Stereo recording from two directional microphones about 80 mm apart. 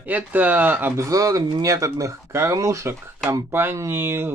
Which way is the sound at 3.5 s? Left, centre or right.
Right.